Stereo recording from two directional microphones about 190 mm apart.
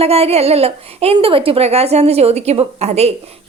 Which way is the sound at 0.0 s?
35° right (ahead or behind).